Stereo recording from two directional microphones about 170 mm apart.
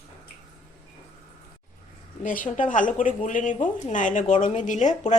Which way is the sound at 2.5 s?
50° left (ahead or behind).